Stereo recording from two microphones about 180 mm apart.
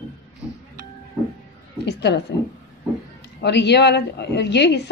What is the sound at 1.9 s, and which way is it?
Speech, 70° left (ahead or behind).